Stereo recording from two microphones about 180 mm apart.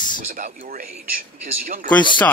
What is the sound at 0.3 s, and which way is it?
Speech, 50° right (ahead or behind).